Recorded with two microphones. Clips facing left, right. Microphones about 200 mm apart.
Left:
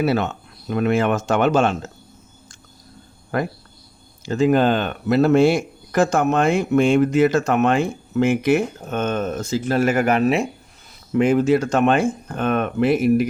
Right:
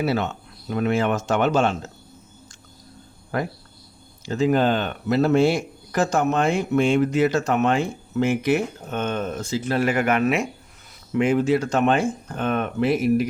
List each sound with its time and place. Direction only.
0.0 s speech: 55° left (ahead or behind)
4.3 s speech: 55° left (ahead or behind)